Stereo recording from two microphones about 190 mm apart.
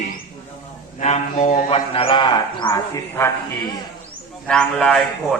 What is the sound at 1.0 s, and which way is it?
Speech, 35° left (ahead or behind).